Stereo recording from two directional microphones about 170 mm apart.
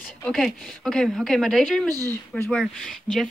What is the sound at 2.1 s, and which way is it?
Speech, 10° left (ahead or behind).